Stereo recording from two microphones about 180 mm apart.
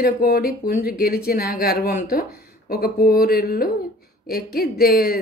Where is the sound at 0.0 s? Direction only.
55° left (ahead or behind).